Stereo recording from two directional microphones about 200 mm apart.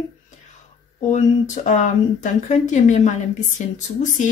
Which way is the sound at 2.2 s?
40° left (ahead or behind).